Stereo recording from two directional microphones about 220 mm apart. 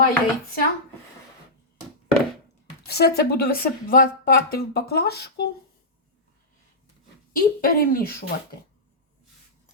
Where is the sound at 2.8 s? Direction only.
45° left (ahead or behind).